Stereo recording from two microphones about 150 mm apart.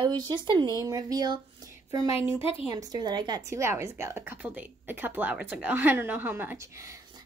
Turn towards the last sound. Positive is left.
turn(degrees=-20)  # may be behind; listen again after turning